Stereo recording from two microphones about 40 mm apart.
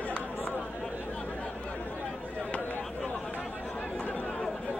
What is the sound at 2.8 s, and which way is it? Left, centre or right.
Chatter, left.